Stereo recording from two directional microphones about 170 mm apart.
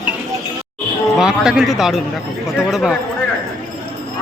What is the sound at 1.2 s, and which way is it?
A man's voice, 5° right (ahead or behind).